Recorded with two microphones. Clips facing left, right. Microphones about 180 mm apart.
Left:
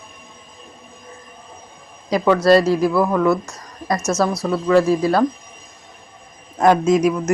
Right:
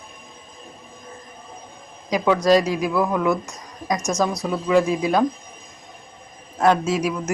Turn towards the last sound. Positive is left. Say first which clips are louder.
# left 7 dB
turn(degrees=-5)  # may be behind; listen again after turning